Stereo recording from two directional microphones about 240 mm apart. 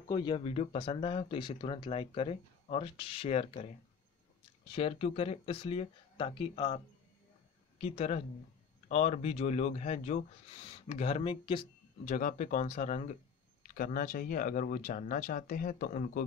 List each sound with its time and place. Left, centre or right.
0.1 s speech: centre
7.8 s speech: left